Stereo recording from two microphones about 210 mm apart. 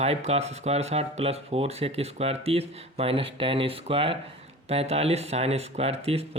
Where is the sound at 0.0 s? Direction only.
30° right (ahead or behind).